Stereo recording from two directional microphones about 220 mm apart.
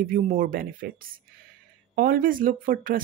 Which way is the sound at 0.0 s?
40° right (ahead or behind).